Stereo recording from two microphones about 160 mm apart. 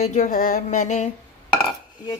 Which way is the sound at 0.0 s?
50° left (ahead or behind).